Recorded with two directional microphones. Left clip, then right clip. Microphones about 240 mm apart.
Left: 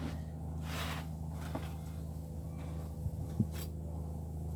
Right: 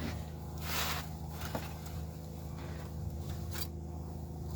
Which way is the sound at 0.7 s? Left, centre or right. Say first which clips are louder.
Right 5 dB; right.